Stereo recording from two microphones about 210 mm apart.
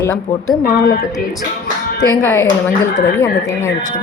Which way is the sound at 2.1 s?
15° left (ahead or behind).